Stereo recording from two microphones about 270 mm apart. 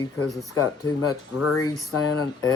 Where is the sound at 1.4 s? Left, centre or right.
Left.